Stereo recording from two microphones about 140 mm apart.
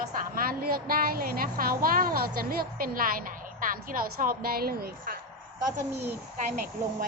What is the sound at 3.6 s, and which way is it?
A woman's voice, 75° right (ahead or behind).